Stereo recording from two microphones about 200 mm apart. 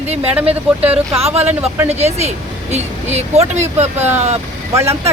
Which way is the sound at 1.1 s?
30° right (ahead or behind).